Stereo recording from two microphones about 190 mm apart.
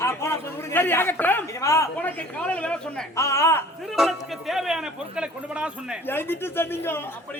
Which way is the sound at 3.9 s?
Centre (ahead or behind).